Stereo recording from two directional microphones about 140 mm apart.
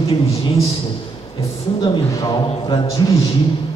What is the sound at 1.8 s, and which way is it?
A man's voice, 30° left (ahead or behind).